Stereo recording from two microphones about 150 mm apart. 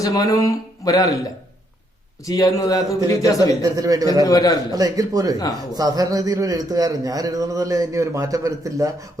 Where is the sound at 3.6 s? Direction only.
25° right (ahead or behind).